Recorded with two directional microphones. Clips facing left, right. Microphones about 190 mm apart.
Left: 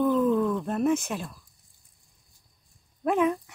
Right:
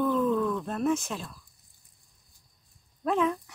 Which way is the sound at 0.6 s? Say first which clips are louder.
Left 3 dB; 10° left (ahead or behind).